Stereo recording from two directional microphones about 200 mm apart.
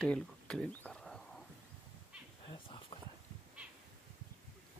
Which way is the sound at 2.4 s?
25° left (ahead or behind).